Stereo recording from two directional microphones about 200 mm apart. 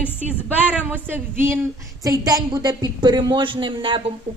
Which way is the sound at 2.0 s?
20° right (ahead or behind).